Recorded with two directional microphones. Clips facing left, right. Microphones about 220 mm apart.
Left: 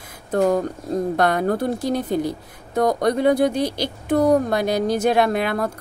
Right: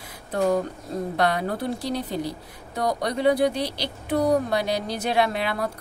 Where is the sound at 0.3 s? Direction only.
45° left (ahead or behind).